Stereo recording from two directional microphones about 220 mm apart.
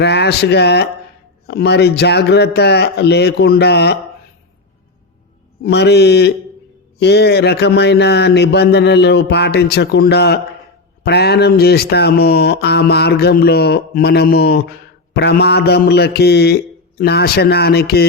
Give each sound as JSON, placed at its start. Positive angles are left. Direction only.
{"t": 0.0, "sound": "speech", "side_deg": 50}
{"t": 5.6, "sound": "speech", "side_deg": 50}